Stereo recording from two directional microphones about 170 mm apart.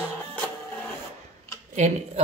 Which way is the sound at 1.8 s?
45° right (ahead or behind).